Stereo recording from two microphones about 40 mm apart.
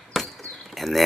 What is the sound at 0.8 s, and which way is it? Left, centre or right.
Speech, centre.